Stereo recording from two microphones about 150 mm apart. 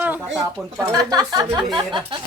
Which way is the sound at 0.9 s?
25° right (ahead or behind).